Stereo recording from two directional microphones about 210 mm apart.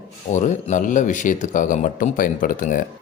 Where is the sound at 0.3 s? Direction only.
35° left (ahead or behind).